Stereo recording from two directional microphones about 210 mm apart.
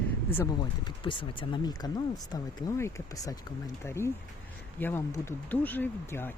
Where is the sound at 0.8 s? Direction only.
25° left (ahead or behind).